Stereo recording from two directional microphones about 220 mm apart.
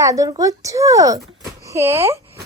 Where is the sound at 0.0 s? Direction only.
15° right (ahead or behind).